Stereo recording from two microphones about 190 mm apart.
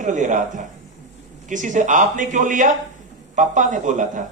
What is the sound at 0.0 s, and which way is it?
A man's voice, 40° right (ahead or behind).